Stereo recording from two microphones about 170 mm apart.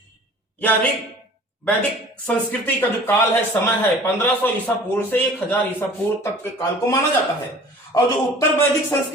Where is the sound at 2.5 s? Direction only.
10° left (ahead or behind).